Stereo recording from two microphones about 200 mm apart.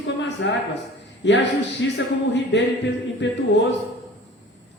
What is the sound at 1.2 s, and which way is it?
A man's voice, 65° left (ahead or behind).